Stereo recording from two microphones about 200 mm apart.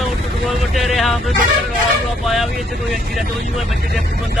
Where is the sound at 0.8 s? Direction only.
Centre (ahead or behind).